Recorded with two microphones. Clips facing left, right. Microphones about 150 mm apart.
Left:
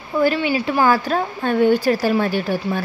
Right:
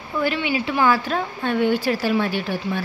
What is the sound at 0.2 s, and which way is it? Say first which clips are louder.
Speech: left 5 dB; 40° left (ahead or behind).